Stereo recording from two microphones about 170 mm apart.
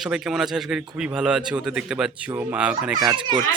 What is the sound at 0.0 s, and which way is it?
Speech, 5° right (ahead or behind).